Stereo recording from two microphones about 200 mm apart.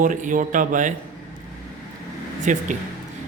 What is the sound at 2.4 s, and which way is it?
Speech, 40° right (ahead or behind).